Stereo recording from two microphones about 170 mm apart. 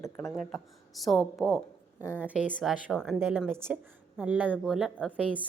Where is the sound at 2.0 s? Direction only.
15° left (ahead or behind).